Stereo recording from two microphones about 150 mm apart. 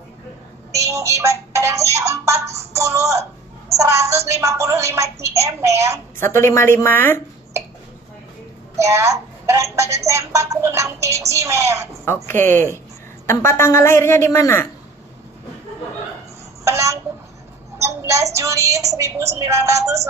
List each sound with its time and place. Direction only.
0.7 s speech: 20° right (ahead or behind)
6.1 s a woman's voice: 15° left (ahead or behind)
8.7 s speech: 20° right (ahead or behind)
12.3 s a woman's voice: 15° left (ahead or behind)
16.6 s a child's voice: 20° right (ahead or behind)